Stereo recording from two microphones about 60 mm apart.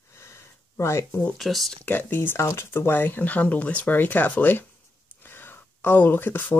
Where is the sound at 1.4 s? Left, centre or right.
Centre.